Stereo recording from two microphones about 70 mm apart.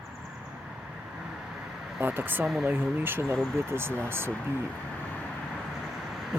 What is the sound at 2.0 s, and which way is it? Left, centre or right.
Speech, right.